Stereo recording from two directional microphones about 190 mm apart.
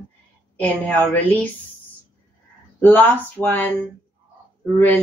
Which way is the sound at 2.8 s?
10° left (ahead or behind).